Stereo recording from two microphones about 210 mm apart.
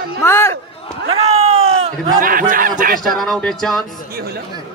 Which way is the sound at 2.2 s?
40° right (ahead or behind).